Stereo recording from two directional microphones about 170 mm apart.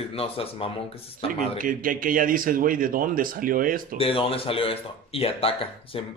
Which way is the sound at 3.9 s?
35° left (ahead or behind).